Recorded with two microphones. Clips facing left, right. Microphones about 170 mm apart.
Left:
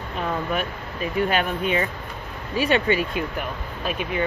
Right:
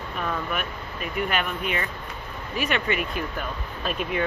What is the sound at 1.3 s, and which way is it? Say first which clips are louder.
Speech: left 5 dB; 30° left (ahead or behind).